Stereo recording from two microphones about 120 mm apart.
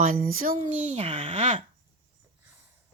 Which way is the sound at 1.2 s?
80° right.